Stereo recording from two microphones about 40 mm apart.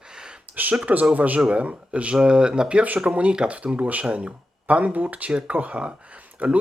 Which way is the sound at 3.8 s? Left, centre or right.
Right.